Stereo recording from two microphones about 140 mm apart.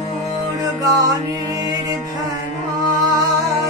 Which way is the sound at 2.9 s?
25° right (ahead or behind).